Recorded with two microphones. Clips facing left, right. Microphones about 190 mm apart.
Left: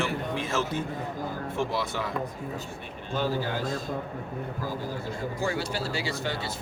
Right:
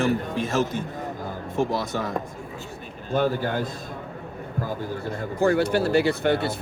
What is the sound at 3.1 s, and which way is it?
Speech, 55° right (ahead or behind).